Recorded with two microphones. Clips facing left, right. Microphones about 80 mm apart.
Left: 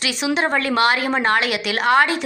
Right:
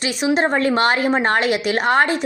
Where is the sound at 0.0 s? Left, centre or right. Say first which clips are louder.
Right 3 dB; right.